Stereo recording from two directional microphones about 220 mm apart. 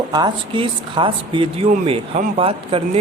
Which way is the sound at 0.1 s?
20° right (ahead or behind).